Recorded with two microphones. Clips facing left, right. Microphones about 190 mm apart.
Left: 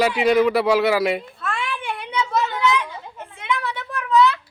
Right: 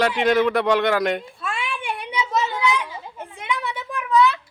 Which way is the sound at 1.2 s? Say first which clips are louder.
Left 1 dB; 10° right (ahead or behind).